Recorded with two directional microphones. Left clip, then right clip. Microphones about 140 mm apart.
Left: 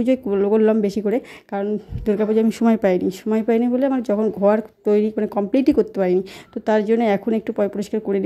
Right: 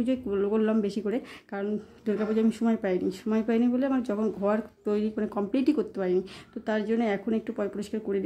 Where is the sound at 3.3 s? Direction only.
35° left (ahead or behind).